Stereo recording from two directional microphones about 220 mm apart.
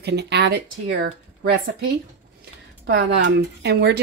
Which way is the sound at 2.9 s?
50° right (ahead or behind).